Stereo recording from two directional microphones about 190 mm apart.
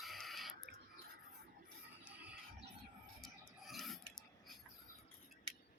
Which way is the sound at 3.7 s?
Centre (ahead or behind).